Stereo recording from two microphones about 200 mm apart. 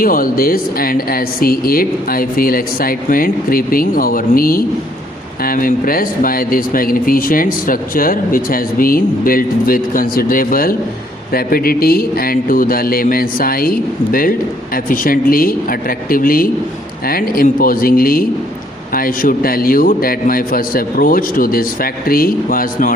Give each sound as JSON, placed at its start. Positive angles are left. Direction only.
{"t": 0.0, "sound": "speech", "side_deg": 45}